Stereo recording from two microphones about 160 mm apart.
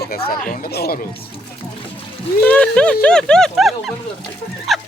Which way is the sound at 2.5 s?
5° left (ahead or behind).